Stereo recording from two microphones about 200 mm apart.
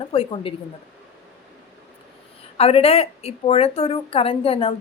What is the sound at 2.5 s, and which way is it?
A woman's voice, 30° left (ahead or behind).